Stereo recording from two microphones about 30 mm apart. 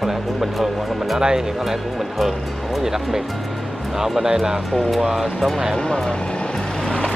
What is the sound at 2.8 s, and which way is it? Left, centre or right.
Speech, centre.